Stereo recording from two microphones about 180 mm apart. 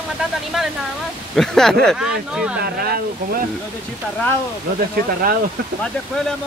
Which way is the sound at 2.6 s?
60° right (ahead or behind).